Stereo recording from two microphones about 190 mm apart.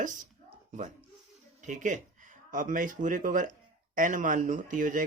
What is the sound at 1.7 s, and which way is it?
Speech, 40° right (ahead or behind).